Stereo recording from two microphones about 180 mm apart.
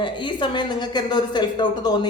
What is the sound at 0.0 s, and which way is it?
Speech, 25° left (ahead or behind).